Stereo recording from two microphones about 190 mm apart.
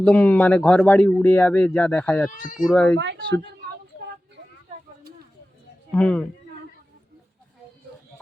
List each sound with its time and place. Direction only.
0.0 s speech: 5° left (ahead or behind)
2.3 s speech: 45° left (ahead or behind)
2.6 s speech: 5° left (ahead or behind)
5.9 s speech: 5° left (ahead or behind)